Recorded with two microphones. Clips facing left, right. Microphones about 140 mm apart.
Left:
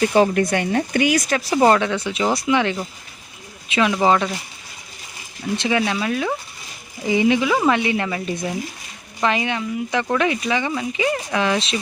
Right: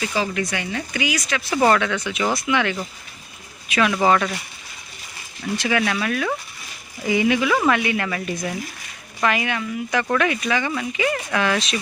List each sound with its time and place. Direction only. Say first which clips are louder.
0.0 s speech: left 8 dB; 50° left (ahead or behind)
1.5 s speech: left 2 dB; 25° left (ahead or behind)
5.5 s speech: left 1 dB; 25° left (ahead or behind)